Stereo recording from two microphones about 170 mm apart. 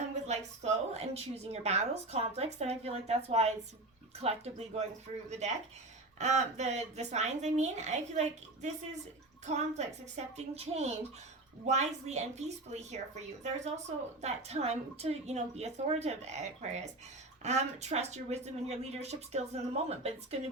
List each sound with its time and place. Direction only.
0.3 s a woman's voice: 40° right (ahead or behind)
14.2 s a woman's voice: 40° right (ahead or behind)